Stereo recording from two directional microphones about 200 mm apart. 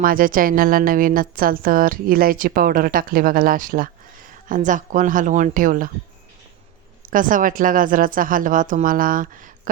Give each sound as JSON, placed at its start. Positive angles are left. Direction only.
{"t": 0.0, "sound": "a woman's voice", "side_deg": -45}
{"t": 7.0, "sound": "a woman's voice", "side_deg": -45}